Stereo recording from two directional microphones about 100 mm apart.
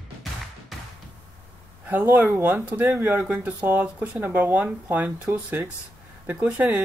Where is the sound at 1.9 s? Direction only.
15° right (ahead or behind).